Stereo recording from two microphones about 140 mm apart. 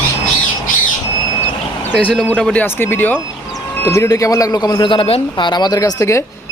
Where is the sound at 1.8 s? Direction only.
15° left (ahead or behind).